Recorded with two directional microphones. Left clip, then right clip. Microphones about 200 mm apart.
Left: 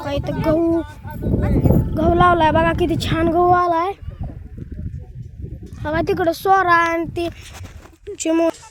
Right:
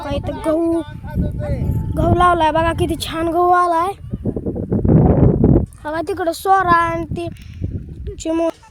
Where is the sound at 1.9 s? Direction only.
Centre (ahead or behind).